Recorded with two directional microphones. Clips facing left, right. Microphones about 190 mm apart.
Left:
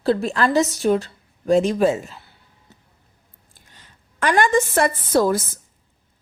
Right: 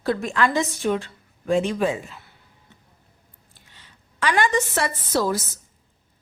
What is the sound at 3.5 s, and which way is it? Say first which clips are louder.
A woman's voice: left 2 dB; 45° left (ahead or behind).